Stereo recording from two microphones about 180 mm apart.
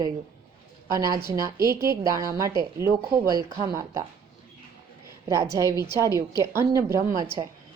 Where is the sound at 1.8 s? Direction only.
20° right (ahead or behind).